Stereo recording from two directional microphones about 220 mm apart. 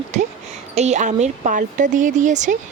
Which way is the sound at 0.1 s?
30° right (ahead or behind).